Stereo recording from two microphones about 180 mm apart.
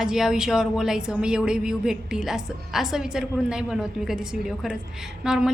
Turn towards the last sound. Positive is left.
turn(degrees=-5)  # may be behind; listen again after turning